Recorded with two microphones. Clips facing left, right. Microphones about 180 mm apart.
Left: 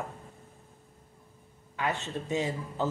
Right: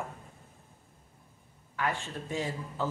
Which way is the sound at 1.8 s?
20° left (ahead or behind).